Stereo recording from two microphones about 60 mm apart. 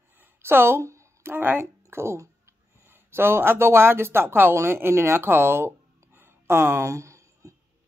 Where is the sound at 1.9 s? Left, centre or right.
Right.